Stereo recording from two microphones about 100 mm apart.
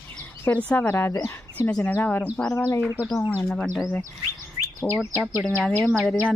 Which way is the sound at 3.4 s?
5° left (ahead or behind).